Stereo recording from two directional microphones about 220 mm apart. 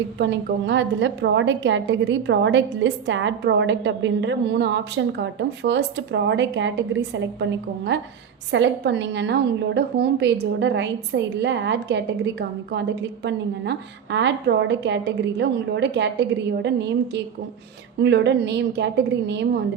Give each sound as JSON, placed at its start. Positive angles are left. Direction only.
{"t": 0.2, "sound": "a woman's voice", "side_deg": -55}
{"t": 18.0, "sound": "a woman's voice", "side_deg": -50}